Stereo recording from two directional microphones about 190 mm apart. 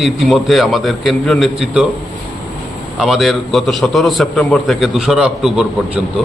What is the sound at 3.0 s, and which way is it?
A man's voice, centre (ahead or behind).